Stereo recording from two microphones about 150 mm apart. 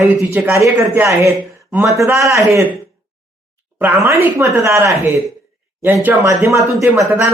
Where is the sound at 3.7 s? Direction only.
15° right (ahead or behind).